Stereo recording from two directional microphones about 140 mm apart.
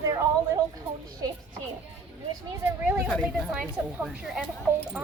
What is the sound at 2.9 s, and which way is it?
A woman's voice, 10° right (ahead or behind).